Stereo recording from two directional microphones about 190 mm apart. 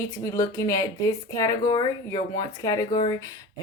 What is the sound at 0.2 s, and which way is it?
Speech, 15° left (ahead or behind).